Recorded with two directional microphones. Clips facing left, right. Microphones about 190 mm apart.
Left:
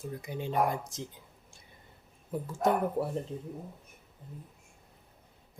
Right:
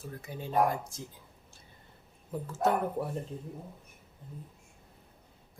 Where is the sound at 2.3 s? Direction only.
10° left (ahead or behind).